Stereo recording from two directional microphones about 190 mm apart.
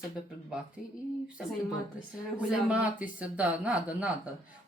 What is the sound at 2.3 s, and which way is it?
Speech, 5° right (ahead or behind).